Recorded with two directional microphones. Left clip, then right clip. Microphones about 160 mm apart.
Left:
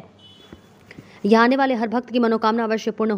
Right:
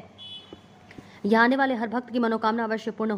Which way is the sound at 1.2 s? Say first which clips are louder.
Left 5 dB; 20° left (ahead or behind).